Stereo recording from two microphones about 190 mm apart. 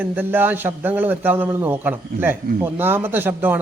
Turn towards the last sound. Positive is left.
turn(degrees=-10)  # may be behind; listen again after turning